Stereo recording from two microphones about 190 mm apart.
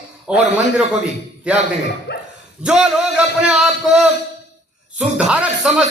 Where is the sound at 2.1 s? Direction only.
60° left (ahead or behind).